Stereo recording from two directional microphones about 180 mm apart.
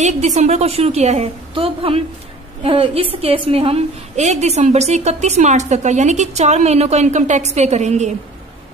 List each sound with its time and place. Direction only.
0.0 s a woman's voice: 40° right (ahead or behind)